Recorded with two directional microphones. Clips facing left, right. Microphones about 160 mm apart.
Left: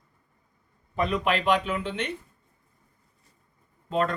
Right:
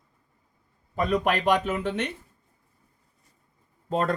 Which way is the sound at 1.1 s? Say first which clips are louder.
Right 2 dB; 45° right (ahead or behind).